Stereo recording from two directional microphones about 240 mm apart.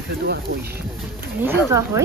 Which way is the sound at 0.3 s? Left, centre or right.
Right.